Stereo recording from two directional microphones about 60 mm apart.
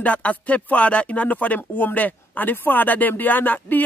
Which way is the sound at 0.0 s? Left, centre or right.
Left.